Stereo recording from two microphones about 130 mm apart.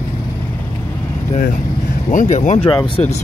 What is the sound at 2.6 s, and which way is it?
Speech, 35° left (ahead or behind).